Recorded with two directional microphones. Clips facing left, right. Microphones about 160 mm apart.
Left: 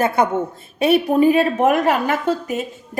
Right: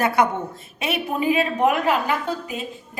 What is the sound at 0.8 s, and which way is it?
A woman's voice, 40° left (ahead or behind).